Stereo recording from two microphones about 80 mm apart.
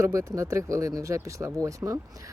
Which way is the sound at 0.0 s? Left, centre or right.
Right.